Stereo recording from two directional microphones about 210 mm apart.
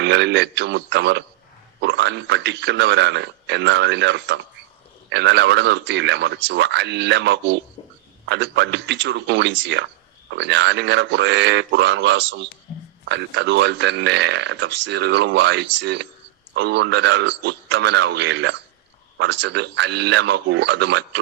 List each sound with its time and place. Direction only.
0.0 s a man's voice: 55° right (ahead or behind)